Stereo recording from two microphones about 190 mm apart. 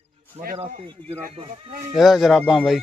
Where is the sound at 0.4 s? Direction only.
35° right (ahead or behind).